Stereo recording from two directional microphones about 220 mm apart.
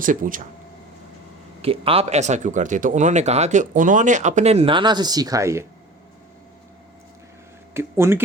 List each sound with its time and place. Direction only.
0.0 s speech: 35° right (ahead or behind)
1.6 s speech: 25° right (ahead or behind)
7.7 s speech: 10° right (ahead or behind)